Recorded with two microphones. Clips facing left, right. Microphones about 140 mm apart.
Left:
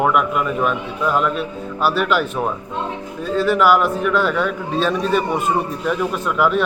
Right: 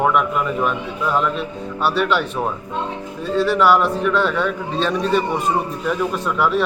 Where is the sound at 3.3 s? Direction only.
Centre (ahead or behind).